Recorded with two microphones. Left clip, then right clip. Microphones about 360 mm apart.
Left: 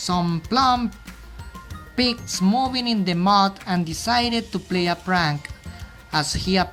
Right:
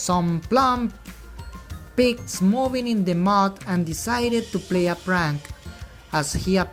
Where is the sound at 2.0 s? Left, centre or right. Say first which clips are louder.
Right 2 dB; centre.